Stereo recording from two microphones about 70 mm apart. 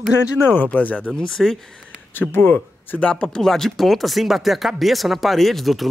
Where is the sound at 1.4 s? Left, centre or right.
Centre.